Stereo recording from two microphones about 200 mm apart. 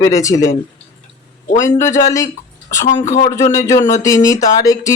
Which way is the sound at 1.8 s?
15° left (ahead or behind).